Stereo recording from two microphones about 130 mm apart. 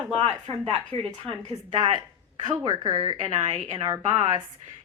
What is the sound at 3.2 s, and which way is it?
Speech, 50° right (ahead or behind).